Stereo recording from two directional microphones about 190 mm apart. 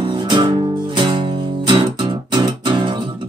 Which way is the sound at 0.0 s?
25° right (ahead or behind).